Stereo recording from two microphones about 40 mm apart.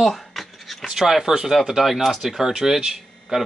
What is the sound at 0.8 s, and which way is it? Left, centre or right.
Speech, centre.